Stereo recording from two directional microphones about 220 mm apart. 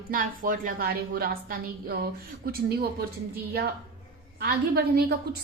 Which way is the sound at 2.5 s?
45° right (ahead or behind).